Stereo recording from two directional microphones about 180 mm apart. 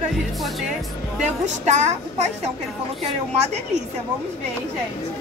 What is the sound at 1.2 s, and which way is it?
A woman's voice, 40° right (ahead or behind).